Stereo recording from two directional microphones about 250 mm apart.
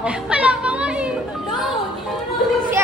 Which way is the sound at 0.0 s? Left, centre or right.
Centre.